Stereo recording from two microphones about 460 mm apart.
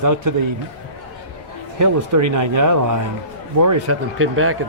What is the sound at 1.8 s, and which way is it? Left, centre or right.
A man's voice, right.